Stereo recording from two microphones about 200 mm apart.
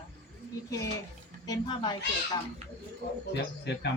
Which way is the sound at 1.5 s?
20° left (ahead or behind).